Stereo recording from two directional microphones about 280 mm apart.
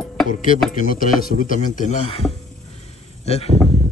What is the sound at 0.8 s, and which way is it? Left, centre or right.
Speech, left.